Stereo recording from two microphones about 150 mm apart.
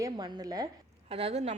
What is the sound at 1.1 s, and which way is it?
Speech, 45° right (ahead or behind).